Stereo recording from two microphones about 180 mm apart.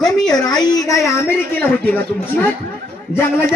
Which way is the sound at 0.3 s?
20° left (ahead or behind).